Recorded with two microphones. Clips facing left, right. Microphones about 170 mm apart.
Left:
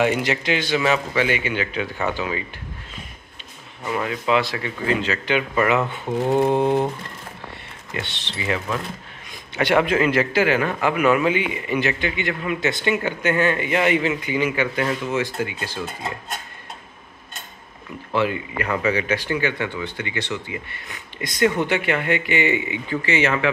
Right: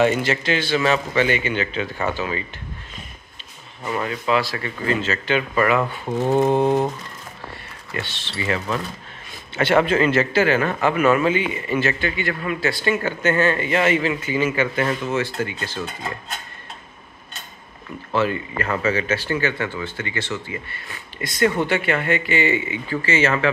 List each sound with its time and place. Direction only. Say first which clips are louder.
0.0 s speech: right 2 dB; 15° left (ahead or behind)
3.8 s mantra: even; 5° left (ahead or behind)
4.1 s speech: left 1 dB; 20° left (ahead or behind)
6.0 s mantra: even; centre (ahead or behind)
6.6 s a sound: right 1 dB; 15° right (ahead or behind)
7.9 s speech: right 1 dB; 20° left (ahead or behind)
18.1 s speech: right 1 dB; 15° left (ahead or behind)